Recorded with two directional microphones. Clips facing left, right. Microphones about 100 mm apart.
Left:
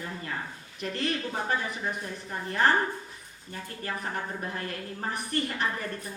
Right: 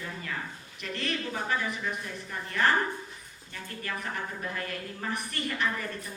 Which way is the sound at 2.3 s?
35° left (ahead or behind).